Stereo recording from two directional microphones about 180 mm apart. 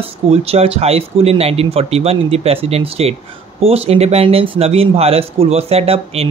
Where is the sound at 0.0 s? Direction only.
35° right (ahead or behind).